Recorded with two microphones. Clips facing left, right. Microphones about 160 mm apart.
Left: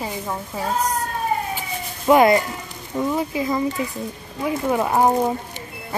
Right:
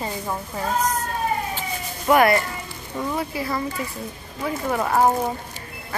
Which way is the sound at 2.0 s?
20° left (ahead or behind).